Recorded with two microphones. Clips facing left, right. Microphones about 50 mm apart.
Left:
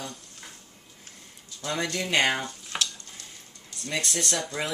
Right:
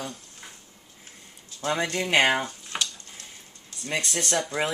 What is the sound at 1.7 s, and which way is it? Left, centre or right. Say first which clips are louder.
Speech: right 3 dB; right.